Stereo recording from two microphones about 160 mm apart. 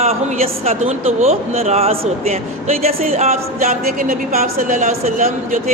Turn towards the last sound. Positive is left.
turn(degrees=-45)  # may be behind; listen again after turning